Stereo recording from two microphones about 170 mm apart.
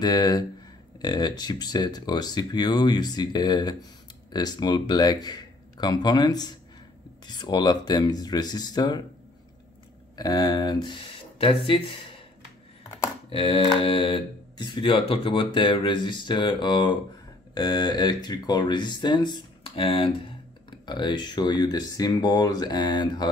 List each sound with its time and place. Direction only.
0.0 s speech: 25° left (ahead or behind)
10.1 s speech: 20° left (ahead or behind)
13.3 s speech: 35° left (ahead or behind)